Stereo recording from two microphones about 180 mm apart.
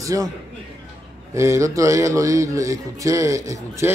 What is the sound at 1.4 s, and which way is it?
A man's voice, 15° right (ahead or behind).